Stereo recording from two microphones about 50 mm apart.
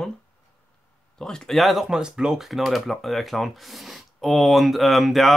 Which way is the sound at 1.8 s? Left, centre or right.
Centre.